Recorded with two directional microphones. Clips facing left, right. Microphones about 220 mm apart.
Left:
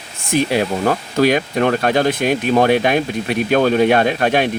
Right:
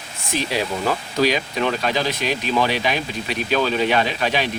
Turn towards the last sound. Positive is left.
turn(degrees=55)  # may be behind; listen again after turning